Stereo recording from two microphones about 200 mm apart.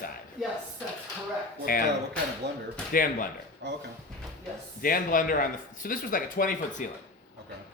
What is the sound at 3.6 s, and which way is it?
Speech, 60° right (ahead or behind).